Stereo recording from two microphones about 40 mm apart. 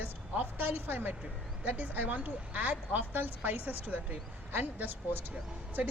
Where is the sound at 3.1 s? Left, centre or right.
Right.